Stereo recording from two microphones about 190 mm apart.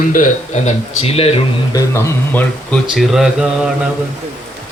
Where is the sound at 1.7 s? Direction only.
15° left (ahead or behind).